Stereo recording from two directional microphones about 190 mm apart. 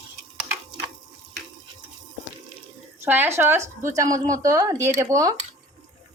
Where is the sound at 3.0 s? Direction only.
10° right (ahead or behind).